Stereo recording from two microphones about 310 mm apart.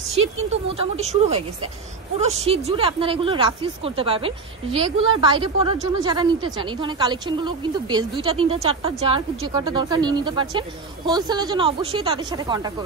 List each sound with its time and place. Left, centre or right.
0.5 s a woman's voice: centre